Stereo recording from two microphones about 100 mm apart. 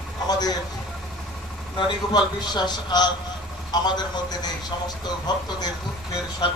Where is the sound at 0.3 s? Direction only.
40° left (ahead or behind).